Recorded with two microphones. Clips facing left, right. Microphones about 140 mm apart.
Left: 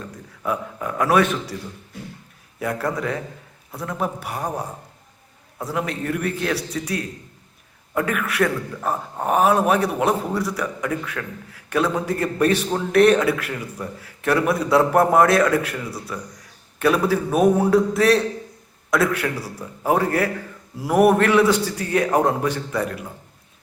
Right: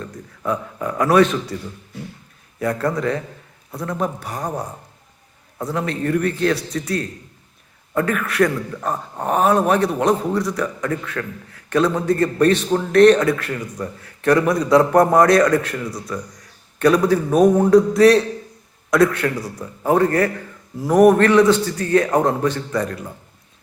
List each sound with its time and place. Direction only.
0.4 s a man's voice: 5° left (ahead or behind)
2.6 s a man's voice: 5° left (ahead or behind)